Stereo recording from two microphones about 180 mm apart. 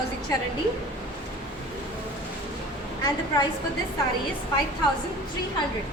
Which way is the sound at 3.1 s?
20° left (ahead or behind).